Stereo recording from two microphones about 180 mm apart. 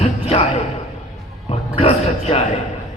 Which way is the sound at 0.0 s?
35° left (ahead or behind).